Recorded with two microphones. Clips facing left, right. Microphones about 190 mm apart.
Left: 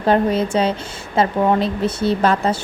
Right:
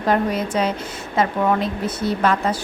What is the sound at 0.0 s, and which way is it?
Speech, 30° left (ahead or behind).